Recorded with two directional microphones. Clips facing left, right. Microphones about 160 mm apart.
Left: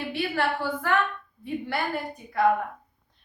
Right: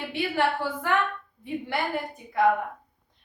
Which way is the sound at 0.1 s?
20° right (ahead or behind).